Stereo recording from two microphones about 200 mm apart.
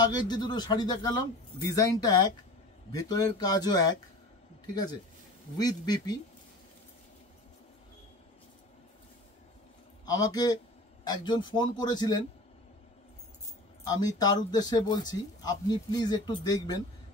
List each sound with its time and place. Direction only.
0.0 s speech: 20° left (ahead or behind)
5.6 s speech: 20° left (ahead or behind)
10.0 s speech: 20° left (ahead or behind)
13.8 s speech: 20° left (ahead or behind)